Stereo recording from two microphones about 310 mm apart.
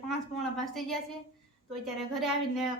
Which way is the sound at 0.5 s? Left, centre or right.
Centre.